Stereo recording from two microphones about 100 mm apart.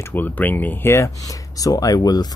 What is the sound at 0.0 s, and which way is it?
Speech, 20° left (ahead or behind).